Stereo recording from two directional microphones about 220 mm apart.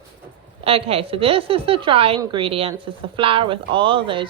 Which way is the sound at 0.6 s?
25° right (ahead or behind).